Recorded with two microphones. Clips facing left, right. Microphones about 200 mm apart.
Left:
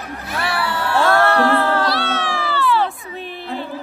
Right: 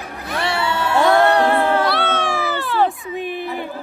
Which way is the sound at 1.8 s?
50° right (ahead or behind).